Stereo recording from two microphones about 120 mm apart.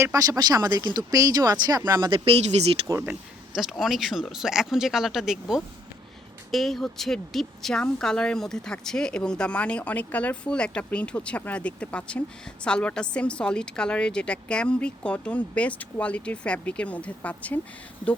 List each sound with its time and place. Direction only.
0.0 s speech: 30° right (ahead or behind)
2.0 s speech: 45° right (ahead or behind)
3.1 s a woman's voice: 5° right (ahead or behind); by 17.6 s 10° left (ahead or behind)